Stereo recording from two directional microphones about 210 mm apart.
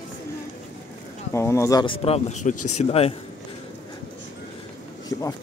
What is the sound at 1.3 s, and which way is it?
Speech, 15° left (ahead or behind).